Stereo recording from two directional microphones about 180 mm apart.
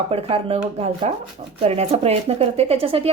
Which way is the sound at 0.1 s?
35° right (ahead or behind).